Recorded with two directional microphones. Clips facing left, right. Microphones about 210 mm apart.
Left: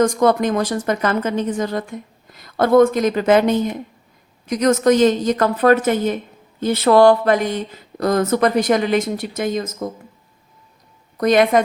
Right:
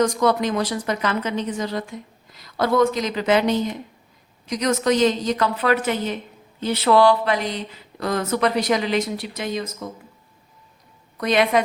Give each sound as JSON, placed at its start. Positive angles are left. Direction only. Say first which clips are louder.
{"t": 0.0, "sound": "a woman's voice", "louder": "left 4 dB", "side_deg": 50}
{"t": 11.2, "sound": "a woman's voice", "louder": "left 5 dB", "side_deg": 45}